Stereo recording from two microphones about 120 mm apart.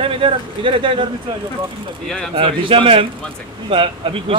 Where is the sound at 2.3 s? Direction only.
45° right (ahead or behind).